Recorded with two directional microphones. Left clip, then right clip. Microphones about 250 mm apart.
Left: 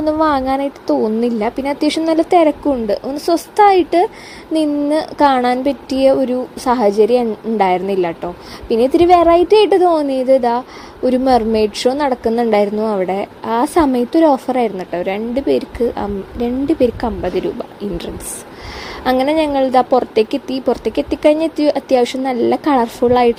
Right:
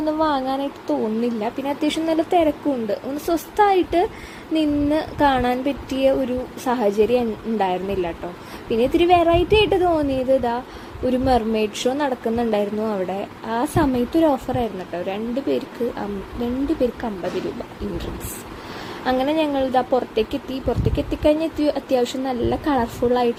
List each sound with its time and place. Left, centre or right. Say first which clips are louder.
0.0 s a woman's voice: left 6 dB; left
19.0 s a woman's voice: left 6 dB; left